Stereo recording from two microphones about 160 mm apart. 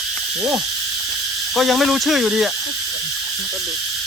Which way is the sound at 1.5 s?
Centre (ahead or behind).